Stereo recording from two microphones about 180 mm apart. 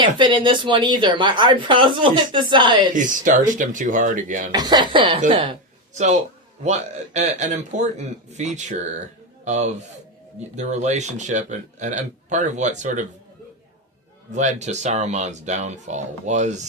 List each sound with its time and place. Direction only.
0.0 s speech: 25° right (ahead or behind)
2.9 s speech: 45° right (ahead or behind)
4.5 s speech: 25° right (ahead or behind)
5.9 s a man's voice: 40° right (ahead or behind)
14.3 s speech: 40° right (ahead or behind)